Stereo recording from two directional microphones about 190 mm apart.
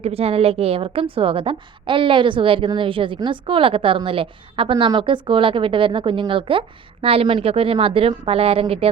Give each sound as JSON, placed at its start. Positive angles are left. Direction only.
{"t": 0.0, "sound": "a woman's voice", "side_deg": -30}